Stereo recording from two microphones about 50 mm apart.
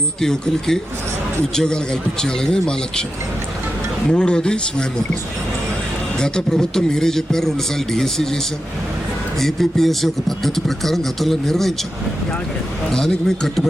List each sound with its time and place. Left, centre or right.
0.2 s a man's voice: centre
4.1 s a man's voice: centre
6.1 s a man's voice: centre
9.4 s speech: centre
12.9 s a man's voice: centre